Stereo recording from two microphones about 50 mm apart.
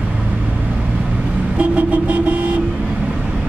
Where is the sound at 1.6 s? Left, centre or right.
Right.